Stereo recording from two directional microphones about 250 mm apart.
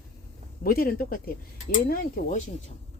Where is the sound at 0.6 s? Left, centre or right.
Left.